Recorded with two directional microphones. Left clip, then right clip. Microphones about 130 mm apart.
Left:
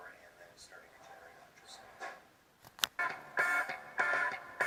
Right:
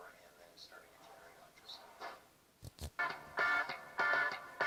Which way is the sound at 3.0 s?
35° left (ahead or behind).